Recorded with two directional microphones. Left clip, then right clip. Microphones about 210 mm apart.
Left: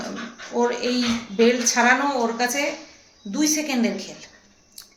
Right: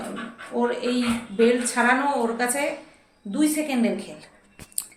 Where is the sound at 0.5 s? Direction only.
15° left (ahead or behind).